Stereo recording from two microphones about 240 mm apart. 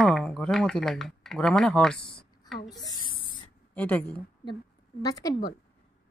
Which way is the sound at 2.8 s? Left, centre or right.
Centre.